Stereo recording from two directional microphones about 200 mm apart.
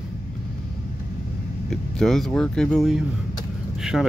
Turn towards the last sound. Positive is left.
turn(degrees=0)  # may be behind; listen again after turning